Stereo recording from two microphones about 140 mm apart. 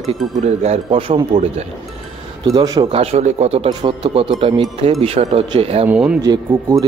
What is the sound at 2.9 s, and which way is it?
Speech, 45° right (ahead or behind).